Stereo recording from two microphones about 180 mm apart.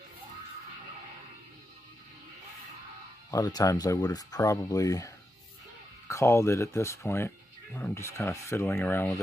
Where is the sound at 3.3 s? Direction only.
20° left (ahead or behind).